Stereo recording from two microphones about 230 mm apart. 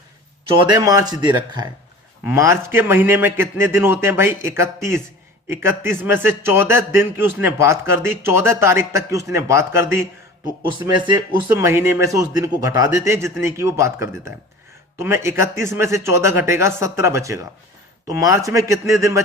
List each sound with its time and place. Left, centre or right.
0.7 s a man's voice: centre